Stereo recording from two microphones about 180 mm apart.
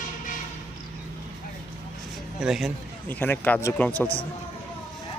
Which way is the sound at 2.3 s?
5° right (ahead or behind).